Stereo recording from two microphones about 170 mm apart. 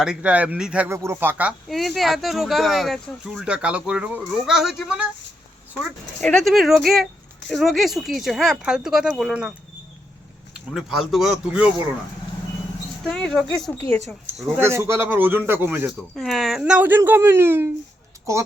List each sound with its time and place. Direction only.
0.0 s speech: 5° right (ahead or behind)
6.1 s speech: centre (ahead or behind)
10.5 s speech: centre (ahead or behind)
13.1 s speech: 5° left (ahead or behind)
14.5 s speech: 15° right (ahead or behind)
16.1 s speech: centre (ahead or behind); by 18.4 s 15° right (ahead or behind)